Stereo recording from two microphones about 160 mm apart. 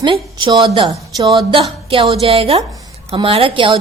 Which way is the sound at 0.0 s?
30° right (ahead or behind).